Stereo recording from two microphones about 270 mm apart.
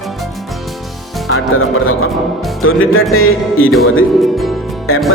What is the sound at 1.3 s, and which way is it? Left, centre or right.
Speech, left.